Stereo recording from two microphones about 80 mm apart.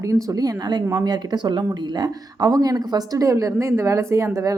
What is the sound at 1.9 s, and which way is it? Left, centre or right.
Speech, right.